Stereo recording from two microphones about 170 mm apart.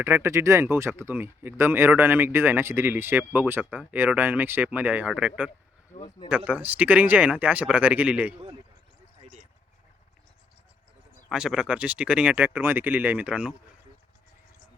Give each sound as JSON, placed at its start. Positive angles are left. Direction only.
{"t": 0.0, "sound": "speech", "side_deg": -15}
{"t": 9.2, "sound": "a sound", "side_deg": -40}
{"t": 11.3, "sound": "speech", "side_deg": -5}